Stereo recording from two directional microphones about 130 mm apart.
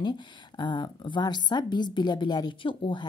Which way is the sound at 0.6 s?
35° left (ahead or behind).